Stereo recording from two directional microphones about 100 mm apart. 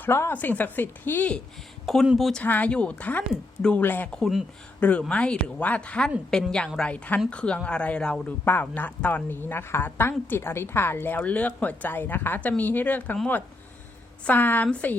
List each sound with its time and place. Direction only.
0.0 s speech: 25° left (ahead or behind)
2.0 s speech: centre (ahead or behind)
2.4 s speech: 15° left (ahead or behind)